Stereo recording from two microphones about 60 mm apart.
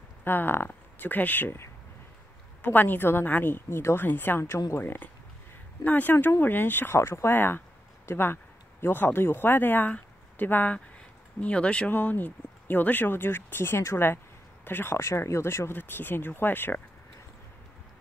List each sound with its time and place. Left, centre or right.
0.2 s speech: left
7.0 s speech: left
7.3 s speech: left